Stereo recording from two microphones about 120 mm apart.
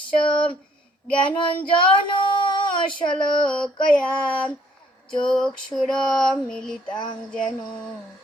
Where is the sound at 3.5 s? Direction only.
10° left (ahead or behind).